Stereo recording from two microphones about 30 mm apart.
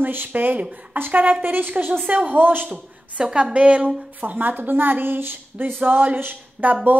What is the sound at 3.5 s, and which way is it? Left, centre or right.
Speech, right.